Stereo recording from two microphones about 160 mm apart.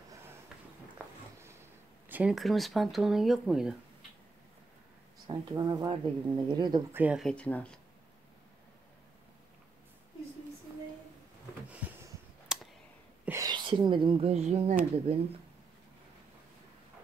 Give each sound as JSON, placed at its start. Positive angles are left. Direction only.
{"t": 2.0, "sound": "a sound", "side_deg": -10}
{"t": 2.3, "sound": "speech", "side_deg": 0}
{"t": 5.2, "sound": "speech", "side_deg": -25}
{"t": 6.9, "sound": "speech", "side_deg": -10}
{"t": 7.2, "sound": "speech", "side_deg": 10}
{"t": 12.5, "sound": "clicking", "side_deg": -5}
{"t": 13.2, "sound": "whispering", "side_deg": -15}
{"t": 13.5, "sound": "speech", "side_deg": -30}